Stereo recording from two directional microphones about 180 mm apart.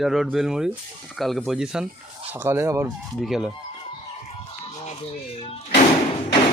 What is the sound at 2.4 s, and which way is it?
Speech, 15° right (ahead or behind).